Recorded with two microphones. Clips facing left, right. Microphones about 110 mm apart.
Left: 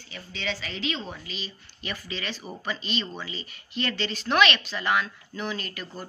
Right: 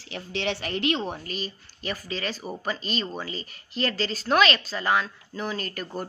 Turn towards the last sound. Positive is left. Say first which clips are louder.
# right 4 dB
turn(degrees=-40)  # may be behind; listen again after turning